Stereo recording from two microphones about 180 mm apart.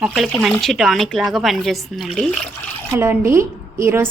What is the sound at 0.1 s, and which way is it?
A woman's voice, centre (ahead or behind).